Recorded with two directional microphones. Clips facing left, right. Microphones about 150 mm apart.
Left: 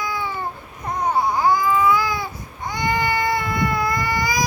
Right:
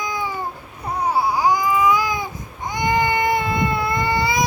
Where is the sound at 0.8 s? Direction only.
10° right (ahead or behind).